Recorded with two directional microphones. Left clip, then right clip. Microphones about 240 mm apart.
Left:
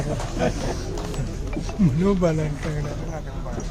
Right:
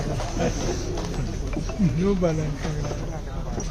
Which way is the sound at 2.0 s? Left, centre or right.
Left.